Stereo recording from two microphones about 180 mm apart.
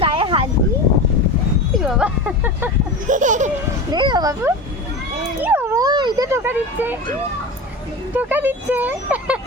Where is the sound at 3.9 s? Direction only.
25° right (ahead or behind).